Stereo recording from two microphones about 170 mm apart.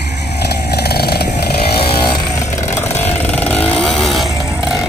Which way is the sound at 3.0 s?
10° left (ahead or behind).